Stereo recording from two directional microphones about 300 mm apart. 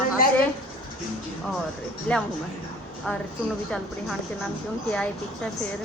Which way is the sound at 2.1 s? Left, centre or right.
Centre.